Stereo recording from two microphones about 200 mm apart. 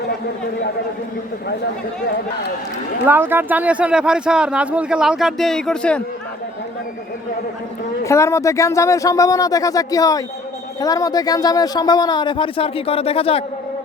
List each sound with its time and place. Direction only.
3.1 s speech: 10° right (ahead or behind)
8.0 s speech: 15° left (ahead or behind)